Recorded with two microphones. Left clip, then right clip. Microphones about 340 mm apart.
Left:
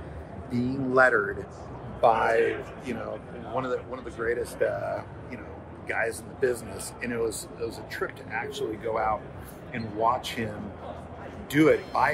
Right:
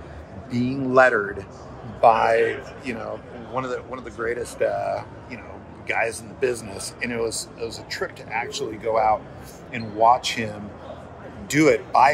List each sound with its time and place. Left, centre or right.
0.5 s speech: right